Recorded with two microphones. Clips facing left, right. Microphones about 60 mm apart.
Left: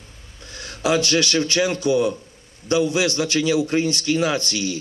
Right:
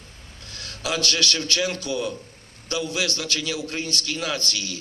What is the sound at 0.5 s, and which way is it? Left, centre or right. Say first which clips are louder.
A man's voice: left 8 dB; left.